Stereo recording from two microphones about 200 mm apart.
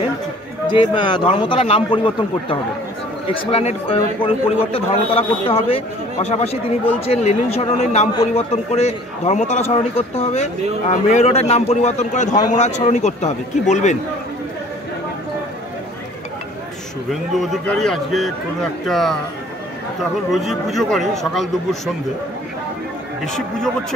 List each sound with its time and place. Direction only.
0.7 s a man's voice: 25° left (ahead or behind)
17.1 s a man's voice: centre (ahead or behind)
23.2 s a man's voice: centre (ahead or behind)